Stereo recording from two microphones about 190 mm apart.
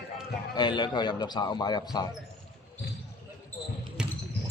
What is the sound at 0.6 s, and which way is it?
A man's voice, 25° left (ahead or behind).